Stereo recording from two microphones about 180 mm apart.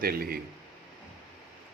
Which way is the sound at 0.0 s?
55° right (ahead or behind).